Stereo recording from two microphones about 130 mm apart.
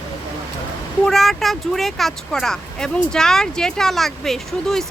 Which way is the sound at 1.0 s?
Centre (ahead or behind).